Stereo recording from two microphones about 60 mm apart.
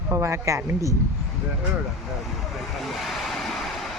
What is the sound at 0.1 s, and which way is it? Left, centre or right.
Speech, right.